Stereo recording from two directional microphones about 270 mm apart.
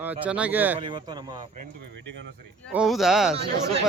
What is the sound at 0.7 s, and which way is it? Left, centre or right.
Speech, centre.